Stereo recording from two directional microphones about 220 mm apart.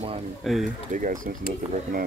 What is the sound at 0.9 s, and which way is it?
Speech, 35° right (ahead or behind).